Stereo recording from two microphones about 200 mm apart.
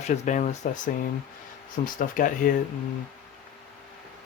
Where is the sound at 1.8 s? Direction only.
45° left (ahead or behind).